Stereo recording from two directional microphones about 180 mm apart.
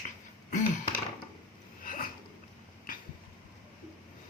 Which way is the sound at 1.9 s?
50° left (ahead or behind).